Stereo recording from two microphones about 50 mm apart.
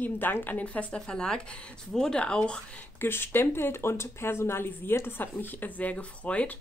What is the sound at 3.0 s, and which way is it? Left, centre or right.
Speech, left.